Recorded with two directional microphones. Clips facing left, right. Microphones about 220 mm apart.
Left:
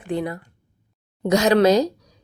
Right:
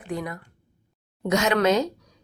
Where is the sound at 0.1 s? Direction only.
30° left (ahead or behind).